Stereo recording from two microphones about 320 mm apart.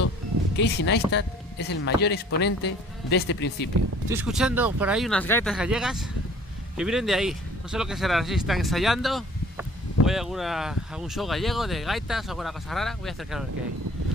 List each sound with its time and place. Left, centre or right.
0.6 s speech: left
4.1 s speech: centre